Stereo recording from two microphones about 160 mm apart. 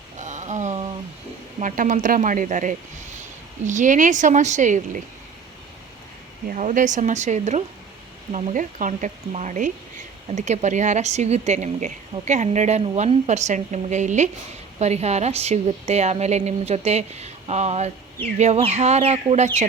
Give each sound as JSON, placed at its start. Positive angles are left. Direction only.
{"t": 0.2, "sound": "a sound", "side_deg": -50}
{"t": 1.5, "sound": "a woman's voice", "side_deg": -55}
{"t": 6.5, "sound": "a woman's voice", "side_deg": -55}